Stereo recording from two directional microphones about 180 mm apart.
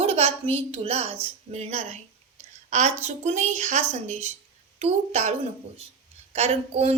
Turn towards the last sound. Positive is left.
turn(degrees=-35)  # may be behind; listen again after turning